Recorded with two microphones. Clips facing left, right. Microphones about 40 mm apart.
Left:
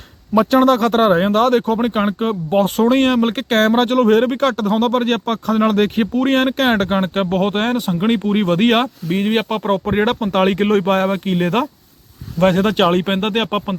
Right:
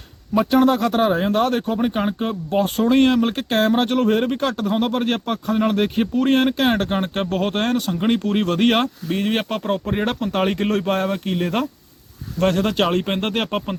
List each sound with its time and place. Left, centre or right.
0.5 s speech: left